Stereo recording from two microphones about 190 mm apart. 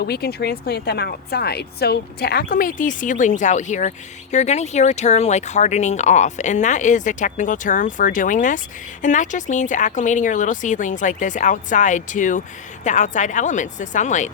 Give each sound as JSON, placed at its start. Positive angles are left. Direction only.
{"t": 0.0, "sound": "speech", "side_deg": 55}